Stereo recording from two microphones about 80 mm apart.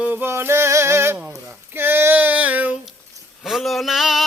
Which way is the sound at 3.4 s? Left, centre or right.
Centre.